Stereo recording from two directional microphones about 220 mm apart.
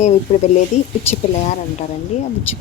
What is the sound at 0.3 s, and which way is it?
Speech, 35° left (ahead or behind).